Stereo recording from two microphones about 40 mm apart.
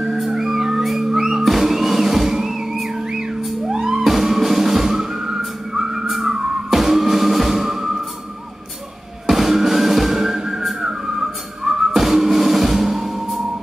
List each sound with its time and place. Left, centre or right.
0.0 s music: centre
3.7 s music: centre
4.0 s music: centre
6.3 s music: centre
6.7 s music: centre
9.2 s music: centre